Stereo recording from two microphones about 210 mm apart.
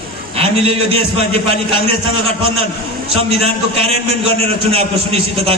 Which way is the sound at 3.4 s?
30° right (ahead or behind).